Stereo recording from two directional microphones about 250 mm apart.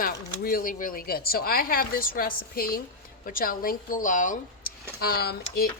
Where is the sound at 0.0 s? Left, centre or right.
Left.